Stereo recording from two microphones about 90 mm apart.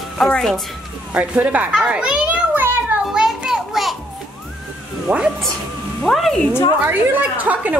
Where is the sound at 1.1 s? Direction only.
15° right (ahead or behind).